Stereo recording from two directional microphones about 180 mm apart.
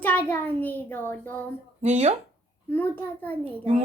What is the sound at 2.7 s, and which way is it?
Speech, 10° left (ahead or behind).